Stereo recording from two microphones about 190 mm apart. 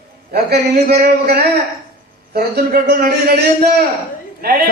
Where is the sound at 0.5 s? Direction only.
55° right (ahead or behind).